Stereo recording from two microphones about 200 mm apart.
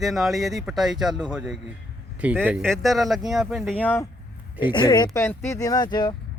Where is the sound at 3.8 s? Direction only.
10° left (ahead or behind).